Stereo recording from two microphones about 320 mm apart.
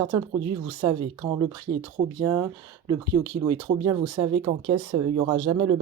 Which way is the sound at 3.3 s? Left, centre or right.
Centre.